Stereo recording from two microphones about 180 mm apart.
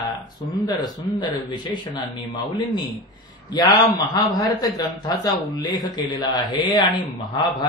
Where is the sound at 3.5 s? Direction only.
20° left (ahead or behind).